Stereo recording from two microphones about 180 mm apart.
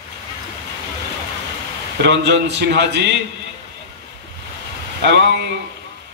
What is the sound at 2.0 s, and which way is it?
Speech, 75° right (ahead or behind).